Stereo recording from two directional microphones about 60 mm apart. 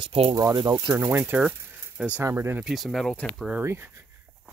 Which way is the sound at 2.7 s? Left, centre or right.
Centre.